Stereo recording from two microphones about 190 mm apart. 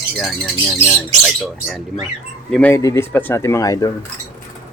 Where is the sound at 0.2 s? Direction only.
Centre (ahead or behind); by 3.9 s 20° left (ahead or behind).